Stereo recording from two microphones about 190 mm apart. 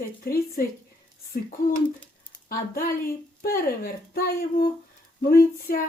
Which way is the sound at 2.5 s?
50° left (ahead or behind).